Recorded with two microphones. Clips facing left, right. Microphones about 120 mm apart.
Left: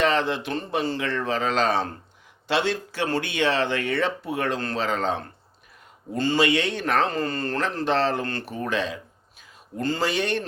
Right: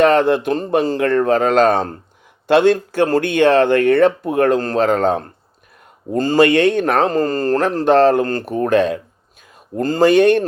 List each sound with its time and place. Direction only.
0.0 s speech: 50° right (ahead or behind)